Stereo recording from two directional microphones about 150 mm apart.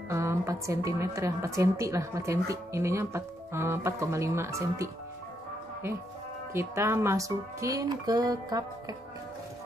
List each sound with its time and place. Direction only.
0.1 s a woman's voice: 20° right (ahead or behind)
6.5 s a woman's voice: 20° right (ahead or behind)